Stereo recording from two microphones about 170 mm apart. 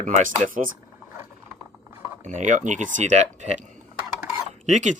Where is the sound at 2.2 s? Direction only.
45° right (ahead or behind).